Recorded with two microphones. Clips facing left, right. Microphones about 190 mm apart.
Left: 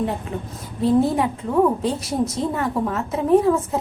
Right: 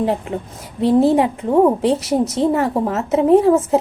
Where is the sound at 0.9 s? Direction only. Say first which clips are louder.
Right 7 dB; 30° right (ahead or behind).